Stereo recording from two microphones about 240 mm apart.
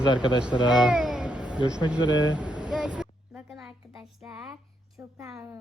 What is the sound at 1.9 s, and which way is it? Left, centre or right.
Speech, centre.